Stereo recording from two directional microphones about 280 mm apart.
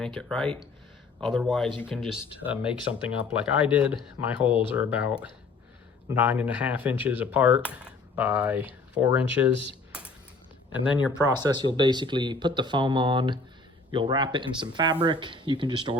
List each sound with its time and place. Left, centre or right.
0.0 s speech: centre
11.3 s speech: centre